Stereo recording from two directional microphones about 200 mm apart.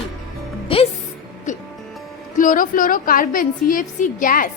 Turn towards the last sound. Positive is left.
turn(degrees=40)  # may be behind; listen again after turning